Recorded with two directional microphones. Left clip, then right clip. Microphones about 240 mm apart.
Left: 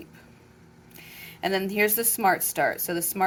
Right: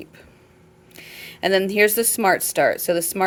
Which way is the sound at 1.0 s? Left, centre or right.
Right.